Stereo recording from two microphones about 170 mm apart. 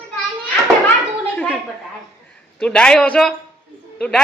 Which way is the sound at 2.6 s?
5° left (ahead or behind).